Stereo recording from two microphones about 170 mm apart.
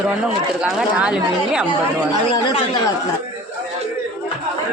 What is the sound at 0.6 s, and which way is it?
Speech, 5° right (ahead or behind).